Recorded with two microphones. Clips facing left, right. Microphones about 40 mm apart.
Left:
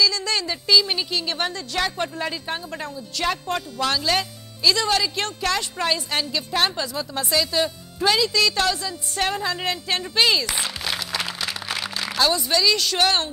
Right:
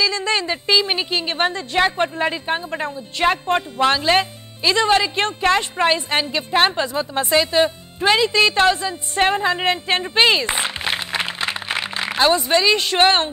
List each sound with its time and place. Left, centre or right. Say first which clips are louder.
0.0 s a woman's voice: right 2 dB; right